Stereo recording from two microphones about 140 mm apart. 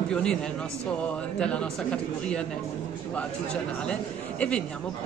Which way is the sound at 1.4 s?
5° left (ahead or behind).